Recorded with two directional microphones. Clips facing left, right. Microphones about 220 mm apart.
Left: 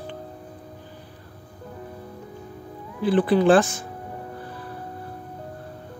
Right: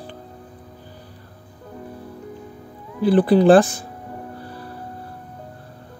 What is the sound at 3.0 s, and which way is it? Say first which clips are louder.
Speech: right 4 dB; 40° right (ahead or behind).